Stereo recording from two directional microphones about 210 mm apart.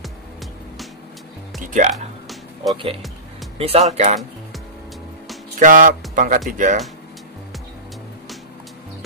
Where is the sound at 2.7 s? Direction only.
25° right (ahead or behind).